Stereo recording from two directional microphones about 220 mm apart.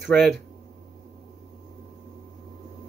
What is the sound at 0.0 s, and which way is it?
Speech, centre (ahead or behind).